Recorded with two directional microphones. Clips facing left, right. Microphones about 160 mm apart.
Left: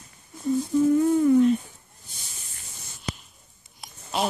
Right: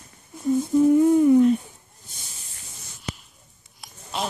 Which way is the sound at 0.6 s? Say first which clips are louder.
Right 4 dB; 20° right (ahead or behind).